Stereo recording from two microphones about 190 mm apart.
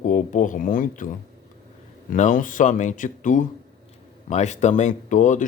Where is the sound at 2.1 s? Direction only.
45° left (ahead or behind).